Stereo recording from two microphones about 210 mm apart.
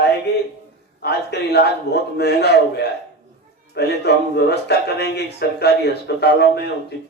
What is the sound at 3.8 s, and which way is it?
Speech, 50° left (ahead or behind).